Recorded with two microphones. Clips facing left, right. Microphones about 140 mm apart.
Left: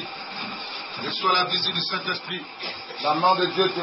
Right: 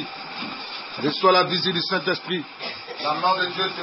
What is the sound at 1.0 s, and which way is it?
Speech, 60° right (ahead or behind).